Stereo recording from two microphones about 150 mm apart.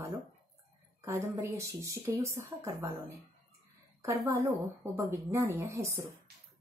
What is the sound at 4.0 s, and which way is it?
Speech, 20° right (ahead or behind).